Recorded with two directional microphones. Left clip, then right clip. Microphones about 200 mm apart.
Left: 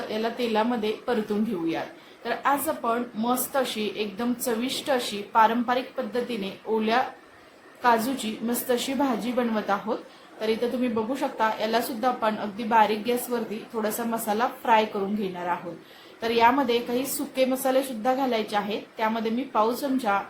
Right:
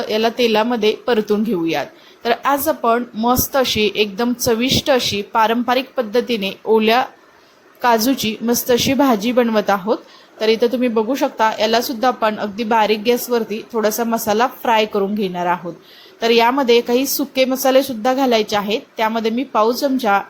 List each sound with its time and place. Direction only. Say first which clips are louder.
0.1 s a woman's voice: right 11 dB; 35° right (ahead or behind)
2.2 s a woman's voice: right 9 dB; 35° right (ahead or behind)